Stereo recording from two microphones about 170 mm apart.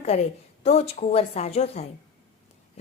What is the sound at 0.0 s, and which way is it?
A woman's voice, 40° left (ahead or behind).